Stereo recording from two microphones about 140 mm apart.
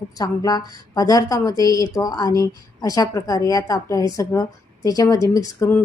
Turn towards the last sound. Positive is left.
turn(degrees=20)  # may be behind; listen again after turning